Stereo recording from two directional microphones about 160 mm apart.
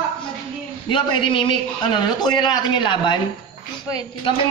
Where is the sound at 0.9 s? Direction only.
30° left (ahead or behind).